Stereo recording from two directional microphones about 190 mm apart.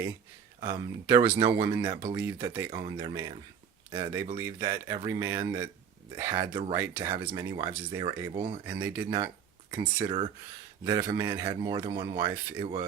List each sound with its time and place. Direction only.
0.6 s speech: 20° right (ahead or behind)
2.8 s speech: 25° right (ahead or behind)
4.4 s speech: 15° right (ahead or behind)
6.4 s speech: 25° right (ahead or behind)
6.7 s speech: 15° right (ahead or behind); by 8.6 s 30° right (ahead or behind)
8.6 s speech: 15° right (ahead or behind); by 10.3 s 30° right (ahead or behind)
10.8 s speech: 20° right (ahead or behind)